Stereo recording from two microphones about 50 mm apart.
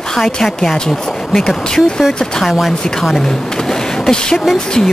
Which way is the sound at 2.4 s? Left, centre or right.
Centre.